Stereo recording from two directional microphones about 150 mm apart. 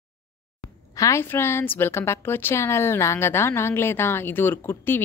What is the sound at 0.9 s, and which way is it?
A woman's voice, 20° left (ahead or behind).